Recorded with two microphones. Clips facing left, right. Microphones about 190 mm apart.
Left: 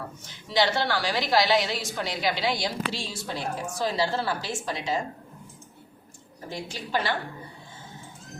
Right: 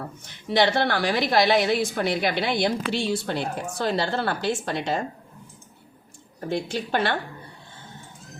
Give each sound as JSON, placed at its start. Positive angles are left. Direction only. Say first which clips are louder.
{"t": 0.3, "sound": "a woman's voice", "louder": "right 3 dB", "side_deg": -60}
{"t": 6.5, "sound": "a woman's voice", "louder": "right 5 dB", "side_deg": -65}